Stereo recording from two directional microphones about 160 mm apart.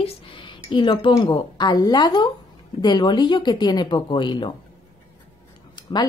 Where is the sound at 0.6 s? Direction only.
30° left (ahead or behind).